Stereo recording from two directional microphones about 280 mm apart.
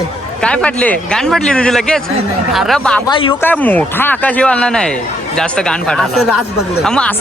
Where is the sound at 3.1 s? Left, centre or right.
Centre.